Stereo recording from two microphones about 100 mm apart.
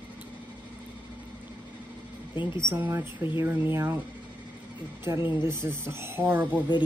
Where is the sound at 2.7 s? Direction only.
25° right (ahead or behind).